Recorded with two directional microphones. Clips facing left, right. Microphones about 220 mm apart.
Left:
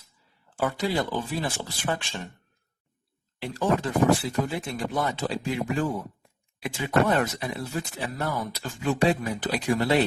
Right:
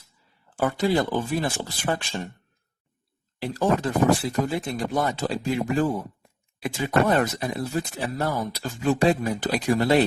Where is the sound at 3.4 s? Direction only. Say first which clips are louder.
Right 2 dB; 40° right (ahead or behind).